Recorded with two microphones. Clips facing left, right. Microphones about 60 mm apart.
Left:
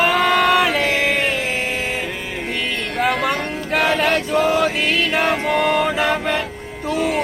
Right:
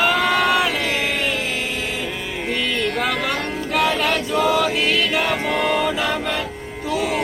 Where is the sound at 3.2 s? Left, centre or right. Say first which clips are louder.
Left 2 dB; left.